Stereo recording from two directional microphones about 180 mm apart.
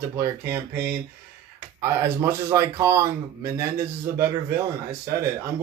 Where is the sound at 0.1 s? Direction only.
15° right (ahead or behind).